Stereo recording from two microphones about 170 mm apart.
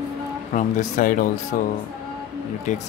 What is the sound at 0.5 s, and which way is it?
Speech, 45° left (ahead or behind).